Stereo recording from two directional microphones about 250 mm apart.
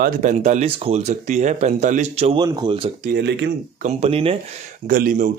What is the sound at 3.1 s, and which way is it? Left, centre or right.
Speech, right.